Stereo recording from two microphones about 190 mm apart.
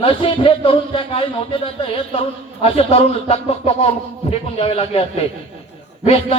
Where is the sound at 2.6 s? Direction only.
30° left (ahead or behind).